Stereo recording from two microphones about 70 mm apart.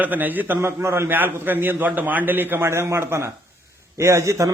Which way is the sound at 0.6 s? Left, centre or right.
Right.